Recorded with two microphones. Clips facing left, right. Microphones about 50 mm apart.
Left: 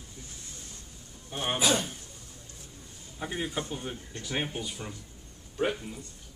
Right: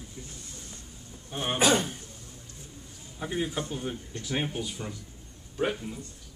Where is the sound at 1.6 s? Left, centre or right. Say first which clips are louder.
Right 4 dB; right.